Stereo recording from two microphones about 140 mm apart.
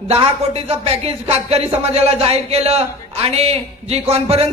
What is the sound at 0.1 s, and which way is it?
Speech, 45° right (ahead or behind).